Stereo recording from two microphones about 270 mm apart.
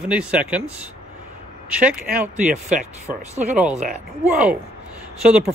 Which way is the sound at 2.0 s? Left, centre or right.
Right.